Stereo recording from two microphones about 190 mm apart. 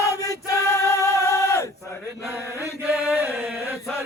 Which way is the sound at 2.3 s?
10° right (ahead or behind).